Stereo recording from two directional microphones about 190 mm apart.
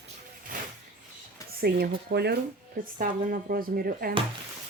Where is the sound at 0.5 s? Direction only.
45° right (ahead or behind).